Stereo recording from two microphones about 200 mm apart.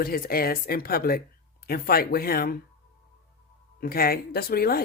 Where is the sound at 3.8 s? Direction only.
50° left (ahead or behind).